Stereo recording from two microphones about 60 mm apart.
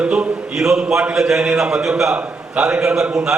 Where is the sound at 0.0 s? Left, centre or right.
Centre.